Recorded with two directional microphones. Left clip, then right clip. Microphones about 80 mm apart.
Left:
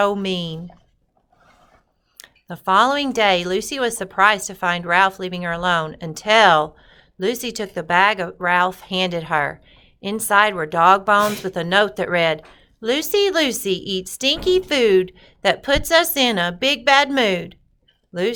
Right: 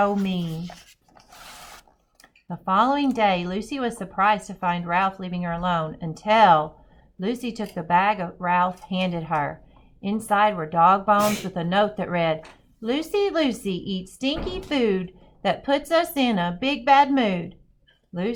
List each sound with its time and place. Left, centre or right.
0.0 s a woman's voice: left
2.1 s a woman's voice: left